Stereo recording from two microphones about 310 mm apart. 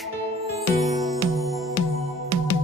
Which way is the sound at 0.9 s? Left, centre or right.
Centre.